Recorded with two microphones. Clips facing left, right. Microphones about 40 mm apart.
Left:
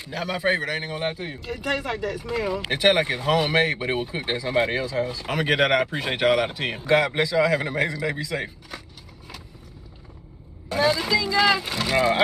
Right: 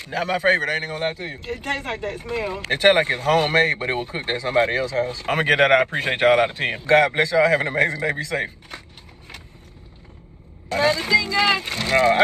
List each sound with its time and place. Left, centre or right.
0.0 s a man's voice: right
3.7 s speech: right
4.4 s a man's voice: right
10.7 s speech: right